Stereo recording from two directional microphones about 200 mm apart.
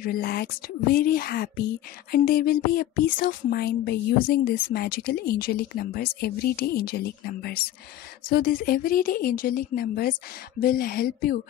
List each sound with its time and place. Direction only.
0.0 s speech: 50° left (ahead or behind)